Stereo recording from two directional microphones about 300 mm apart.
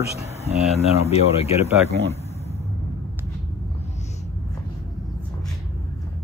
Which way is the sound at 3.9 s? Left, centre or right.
Left.